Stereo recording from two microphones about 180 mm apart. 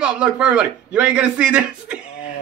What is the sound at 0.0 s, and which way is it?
A man's voice, 5° right (ahead or behind).